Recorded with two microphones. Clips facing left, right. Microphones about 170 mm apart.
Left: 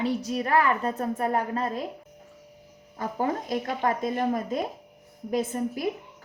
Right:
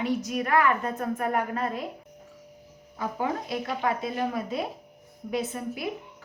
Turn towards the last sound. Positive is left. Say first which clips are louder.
# left 3 dB
turn(degrees=45)  # may be behind; listen again after turning